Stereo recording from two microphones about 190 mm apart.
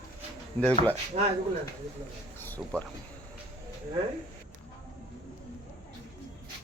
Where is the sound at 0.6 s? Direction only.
10° left (ahead or behind).